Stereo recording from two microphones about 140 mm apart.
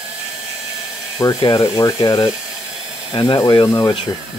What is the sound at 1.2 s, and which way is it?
Speech, 30° left (ahead or behind).